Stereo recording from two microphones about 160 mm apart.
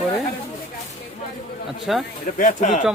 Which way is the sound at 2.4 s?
50° left (ahead or behind).